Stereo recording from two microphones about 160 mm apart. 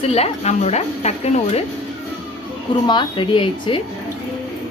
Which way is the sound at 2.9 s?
30° left (ahead or behind).